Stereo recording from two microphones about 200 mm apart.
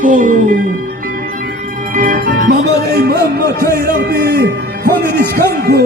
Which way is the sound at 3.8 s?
50° right (ahead or behind).